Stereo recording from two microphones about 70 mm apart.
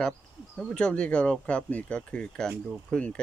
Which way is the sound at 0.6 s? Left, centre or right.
Centre.